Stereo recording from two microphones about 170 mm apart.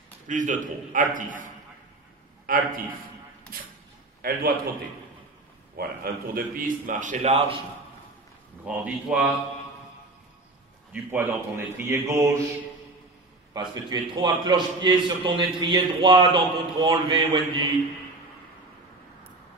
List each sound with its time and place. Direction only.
0.3 s a man's voice: 50° right (ahead or behind)
4.2 s a man's voice: 60° right (ahead or behind)
5.8 s a man's voice: 60° right (ahead or behind); by 7.5 s 40° right (ahead or behind)
8.6 s a man's voice: 5° right (ahead or behind)
10.9 s a man's voice: 10° right (ahead or behind)
13.5 s a man's voice: 25° right (ahead or behind)